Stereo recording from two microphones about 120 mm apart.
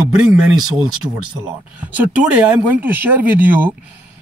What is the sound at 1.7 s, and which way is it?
Speech, 10° right (ahead or behind).